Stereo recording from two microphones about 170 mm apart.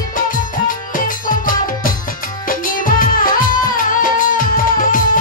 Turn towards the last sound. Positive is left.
turn(degrees=55)  # may be behind; listen again after turning